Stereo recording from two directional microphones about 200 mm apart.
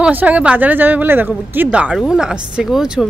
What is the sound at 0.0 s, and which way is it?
Speech, 10° right (ahead or behind).